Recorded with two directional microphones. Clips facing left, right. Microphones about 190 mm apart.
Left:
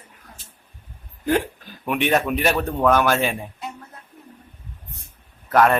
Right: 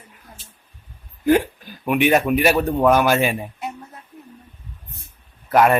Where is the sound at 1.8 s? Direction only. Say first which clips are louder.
Right 4 dB; 5° right (ahead or behind).